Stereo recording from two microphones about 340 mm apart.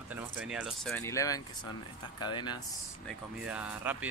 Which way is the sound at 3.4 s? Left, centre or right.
Centre.